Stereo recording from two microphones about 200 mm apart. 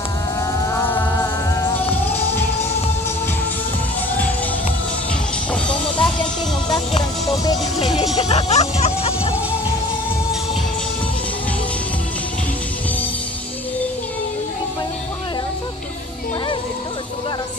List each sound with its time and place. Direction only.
0.6 s music: 15° left (ahead or behind)
5.5 s music: 5° left (ahead or behind)
7.0 s music: 20° left (ahead or behind)
8.2 s speech: 30° left (ahead or behind)